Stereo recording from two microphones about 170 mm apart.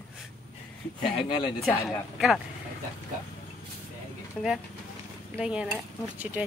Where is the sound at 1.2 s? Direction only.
30° left (ahead or behind).